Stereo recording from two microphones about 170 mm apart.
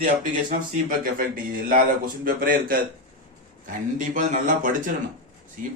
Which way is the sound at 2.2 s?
60° right (ahead or behind).